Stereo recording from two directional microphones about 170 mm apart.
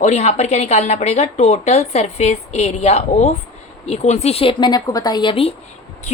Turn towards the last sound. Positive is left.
turn(degrees=30)  # may be behind; listen again after turning